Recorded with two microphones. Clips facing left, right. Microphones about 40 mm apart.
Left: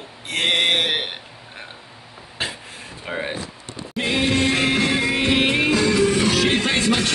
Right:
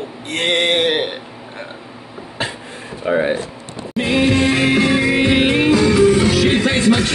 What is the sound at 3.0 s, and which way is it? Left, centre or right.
Speech, centre.